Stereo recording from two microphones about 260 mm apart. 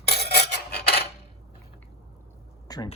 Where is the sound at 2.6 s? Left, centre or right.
Centre.